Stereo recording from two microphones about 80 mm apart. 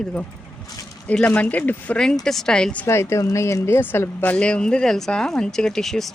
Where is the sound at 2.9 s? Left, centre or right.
Left.